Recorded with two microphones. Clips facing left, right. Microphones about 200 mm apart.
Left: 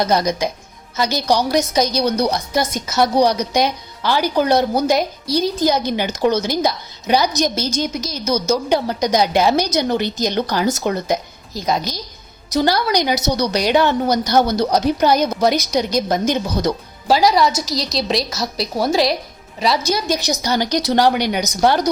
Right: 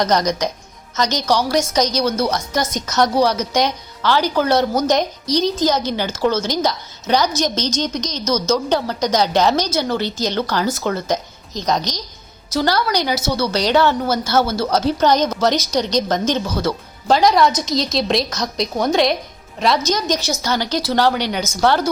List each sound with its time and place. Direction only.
0.0 s a woman's voice: 10° left (ahead or behind)
17.1 s a woman's voice: 5° left (ahead or behind)